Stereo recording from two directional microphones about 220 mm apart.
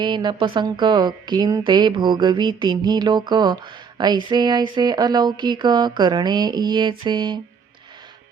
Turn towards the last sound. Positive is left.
turn(degrees=-20)  # may be behind; listen again after turning